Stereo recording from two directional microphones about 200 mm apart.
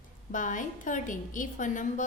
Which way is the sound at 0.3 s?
40° left (ahead or behind).